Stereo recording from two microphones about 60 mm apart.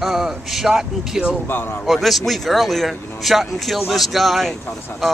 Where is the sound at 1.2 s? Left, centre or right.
Left.